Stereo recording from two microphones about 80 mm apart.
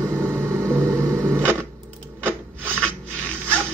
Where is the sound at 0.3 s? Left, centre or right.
Centre.